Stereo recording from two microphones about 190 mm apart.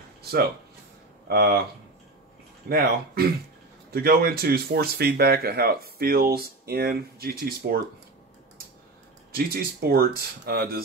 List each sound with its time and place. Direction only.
0.2 s speech: 55° right (ahead or behind)
2.7 s speech: 55° right (ahead or behind)
9.3 s speech: 55° right (ahead or behind)